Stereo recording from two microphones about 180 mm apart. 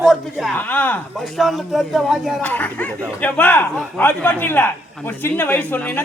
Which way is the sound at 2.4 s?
10° left (ahead or behind).